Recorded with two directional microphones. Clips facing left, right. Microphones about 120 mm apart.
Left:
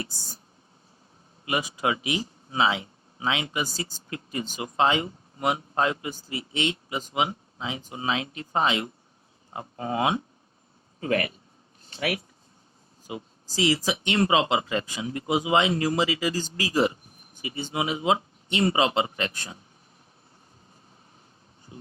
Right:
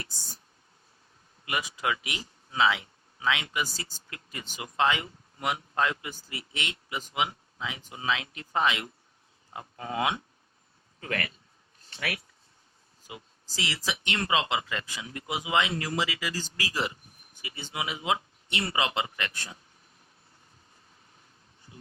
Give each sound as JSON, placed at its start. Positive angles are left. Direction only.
{"t": 0.0, "sound": "speech", "side_deg": 15}
{"t": 1.5, "sound": "speech", "side_deg": 25}
{"t": 4.1, "sound": "speech", "side_deg": 25}
{"t": 21.7, "sound": "a sound", "side_deg": 25}